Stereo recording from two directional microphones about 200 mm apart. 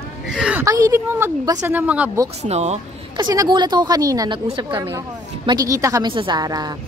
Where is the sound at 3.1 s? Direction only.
20° right (ahead or behind).